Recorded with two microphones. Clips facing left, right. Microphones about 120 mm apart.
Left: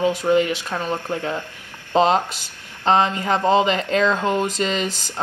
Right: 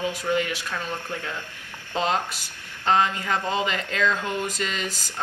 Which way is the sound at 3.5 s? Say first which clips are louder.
Left 9 dB; 25° left (ahead or behind).